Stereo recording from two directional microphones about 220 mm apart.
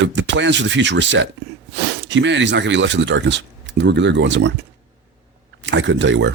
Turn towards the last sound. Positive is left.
turn(degrees=-55)  # may be behind; listen again after turning